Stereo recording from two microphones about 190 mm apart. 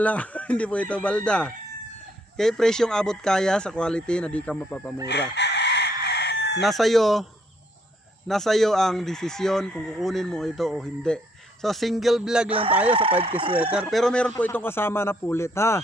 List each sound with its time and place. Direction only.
0.0 s a man's voice: 5° left (ahead or behind)
5.0 s chicken: 65° left (ahead or behind)
6.6 s speech: centre (ahead or behind)
8.3 s speech: centre (ahead or behind)
12.9 s speech: 30° right (ahead or behind)
13.7 s a man's voice: centre (ahead or behind)